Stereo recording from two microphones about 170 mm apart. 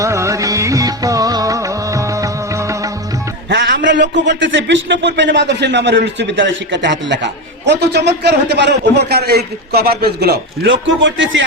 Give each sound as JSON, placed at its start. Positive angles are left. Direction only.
{"t": 0.0, "sound": "music", "side_deg": -15}
{"t": 3.5, "sound": "music", "side_deg": -90}
{"t": 3.8, "sound": "speech", "side_deg": -90}